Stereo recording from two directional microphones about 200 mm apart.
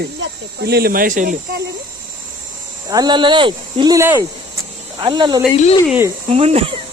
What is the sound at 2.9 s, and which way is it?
Speech, 20° right (ahead or behind).